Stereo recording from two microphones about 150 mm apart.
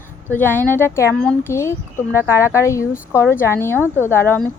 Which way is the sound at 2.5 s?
20° left (ahead or behind).